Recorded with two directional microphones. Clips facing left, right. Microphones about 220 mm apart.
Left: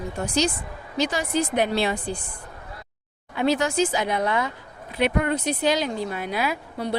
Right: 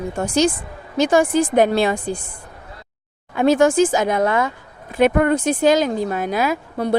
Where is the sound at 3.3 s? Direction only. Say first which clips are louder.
Right 7 dB; 50° right (ahead or behind).